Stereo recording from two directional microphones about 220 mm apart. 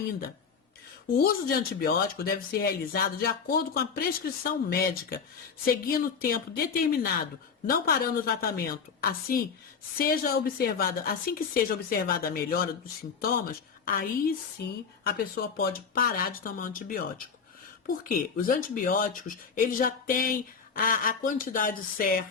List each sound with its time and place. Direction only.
1.2 s a woman's voice: 45° left (ahead or behind)
18.1 s a woman's voice: 40° left (ahead or behind)